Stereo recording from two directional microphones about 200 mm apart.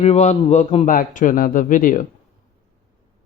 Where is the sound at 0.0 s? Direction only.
35° left (ahead or behind).